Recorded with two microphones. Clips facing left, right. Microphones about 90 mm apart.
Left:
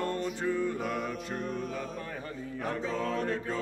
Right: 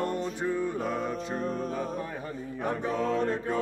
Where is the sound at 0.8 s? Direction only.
30° right (ahead or behind).